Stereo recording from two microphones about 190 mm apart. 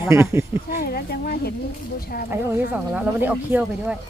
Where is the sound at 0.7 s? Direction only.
50° left (ahead or behind).